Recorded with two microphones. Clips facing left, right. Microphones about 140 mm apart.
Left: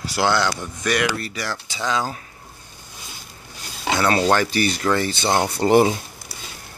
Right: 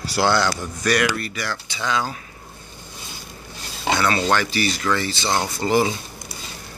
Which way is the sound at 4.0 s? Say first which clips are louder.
Left 3 dB; 40° left (ahead or behind).